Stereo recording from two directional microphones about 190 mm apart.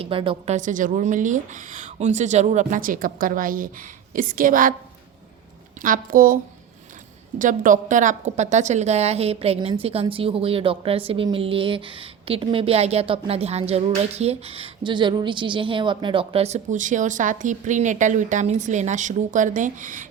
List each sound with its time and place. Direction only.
0.0 s a woman's voice: 30° right (ahead or behind); by 4.7 s 45° right (ahead or behind)
5.8 s a woman's voice: 45° right (ahead or behind)